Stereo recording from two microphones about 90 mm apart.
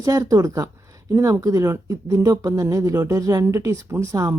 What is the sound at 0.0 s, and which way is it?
Speech, 40° right (ahead or behind).